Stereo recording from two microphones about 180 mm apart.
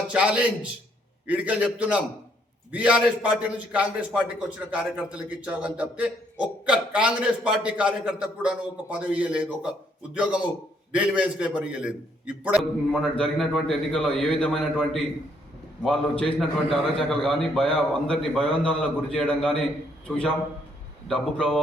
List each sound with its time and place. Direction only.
0.1 s a man's voice: 5° right (ahead or behind)
10.9 s a man's voice: 5° right (ahead or behind)
12.9 s a man's voice: 5° left (ahead or behind)